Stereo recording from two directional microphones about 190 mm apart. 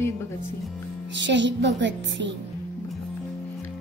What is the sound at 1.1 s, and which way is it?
Speech, 70° right (ahead or behind).